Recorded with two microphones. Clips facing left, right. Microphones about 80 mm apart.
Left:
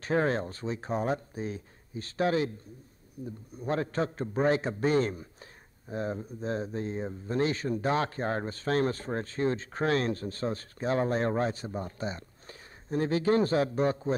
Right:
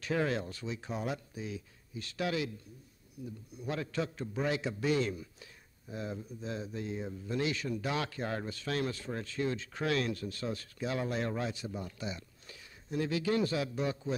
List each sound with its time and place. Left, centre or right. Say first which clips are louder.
0.0 s a man's voice: left 5 dB; left